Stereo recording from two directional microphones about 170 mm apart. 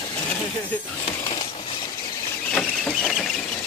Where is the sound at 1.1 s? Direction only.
35° left (ahead or behind).